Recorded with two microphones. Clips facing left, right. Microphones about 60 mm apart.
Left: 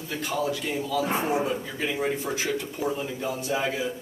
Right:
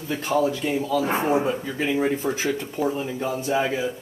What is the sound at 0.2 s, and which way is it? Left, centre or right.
A man's voice, right.